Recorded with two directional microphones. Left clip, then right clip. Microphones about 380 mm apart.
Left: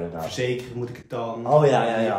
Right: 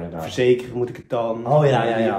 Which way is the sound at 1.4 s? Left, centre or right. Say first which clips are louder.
Left 1 dB; centre.